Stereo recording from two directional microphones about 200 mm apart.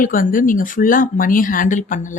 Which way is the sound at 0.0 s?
45° left (ahead or behind).